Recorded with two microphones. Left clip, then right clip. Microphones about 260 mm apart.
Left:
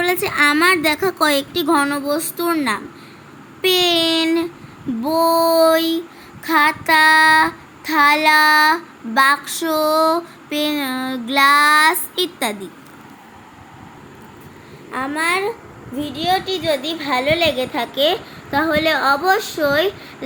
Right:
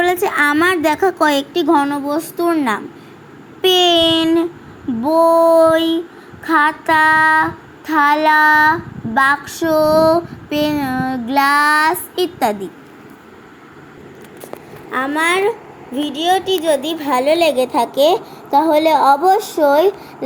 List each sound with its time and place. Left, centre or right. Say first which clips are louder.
0.0 s child singing: right 2 dB; centre
14.9 s a woman's voice: right 4 dB; centre